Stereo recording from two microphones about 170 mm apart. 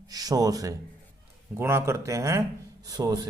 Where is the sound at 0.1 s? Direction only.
20° right (ahead or behind).